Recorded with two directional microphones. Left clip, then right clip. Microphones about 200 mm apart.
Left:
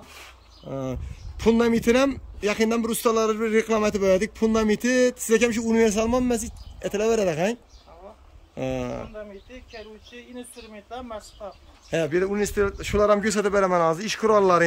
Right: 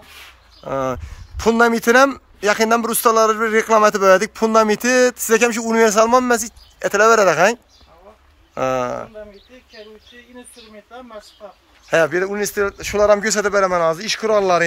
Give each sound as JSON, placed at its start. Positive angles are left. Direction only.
{"t": 0.7, "sound": "speech", "side_deg": -30}
{"t": 0.9, "sound": "speech", "side_deg": 5}
{"t": 8.5, "sound": "speech", "side_deg": 0}
{"t": 10.9, "sound": "speech", "side_deg": 25}
{"t": 11.9, "sound": "a man's voice", "side_deg": 5}